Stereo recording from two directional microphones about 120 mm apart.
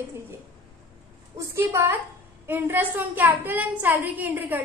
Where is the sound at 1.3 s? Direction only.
20° right (ahead or behind).